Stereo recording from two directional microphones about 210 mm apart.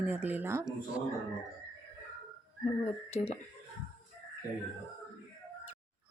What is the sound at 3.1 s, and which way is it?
Speech, 30° left (ahead or behind).